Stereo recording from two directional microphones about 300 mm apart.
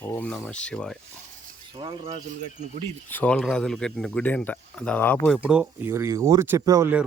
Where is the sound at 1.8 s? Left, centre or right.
Right.